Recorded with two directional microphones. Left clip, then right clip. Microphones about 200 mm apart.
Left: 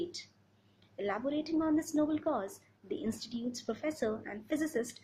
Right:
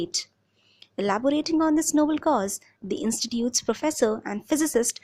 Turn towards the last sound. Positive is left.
turn(degrees=-50)  # may be behind; listen again after turning